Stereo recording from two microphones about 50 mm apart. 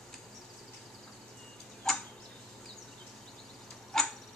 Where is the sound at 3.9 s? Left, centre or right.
Centre.